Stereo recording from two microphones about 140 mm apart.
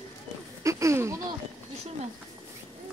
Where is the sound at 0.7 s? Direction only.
20° right (ahead or behind).